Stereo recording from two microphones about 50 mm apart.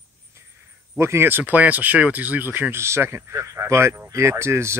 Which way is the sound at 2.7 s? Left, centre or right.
Right.